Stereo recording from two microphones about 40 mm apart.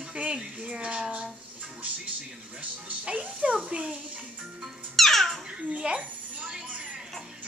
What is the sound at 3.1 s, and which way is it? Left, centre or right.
Speech, right.